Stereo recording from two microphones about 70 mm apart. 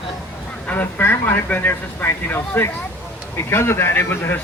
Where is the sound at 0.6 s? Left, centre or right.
Left.